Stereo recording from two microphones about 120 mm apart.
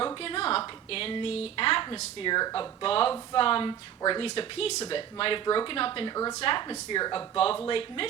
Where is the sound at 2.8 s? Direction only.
50° left (ahead or behind); by 6.4 s 35° left (ahead or behind).